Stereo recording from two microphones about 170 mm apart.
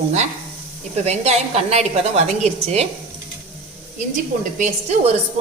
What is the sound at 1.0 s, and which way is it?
A woman's voice, 40° right (ahead or behind).